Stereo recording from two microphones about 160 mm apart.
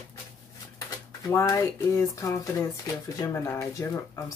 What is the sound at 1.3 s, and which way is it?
A woman's voice, 15° left (ahead or behind).